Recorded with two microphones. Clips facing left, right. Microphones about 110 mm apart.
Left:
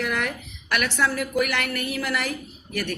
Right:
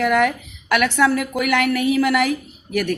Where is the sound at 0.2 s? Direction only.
90° right.